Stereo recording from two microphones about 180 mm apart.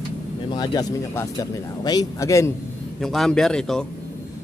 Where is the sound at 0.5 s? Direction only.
20° left (ahead or behind).